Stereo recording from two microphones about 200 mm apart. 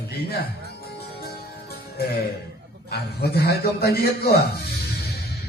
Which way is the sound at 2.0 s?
50° left (ahead or behind).